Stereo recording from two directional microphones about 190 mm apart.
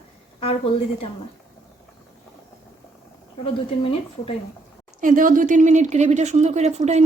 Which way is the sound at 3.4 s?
30° left (ahead or behind).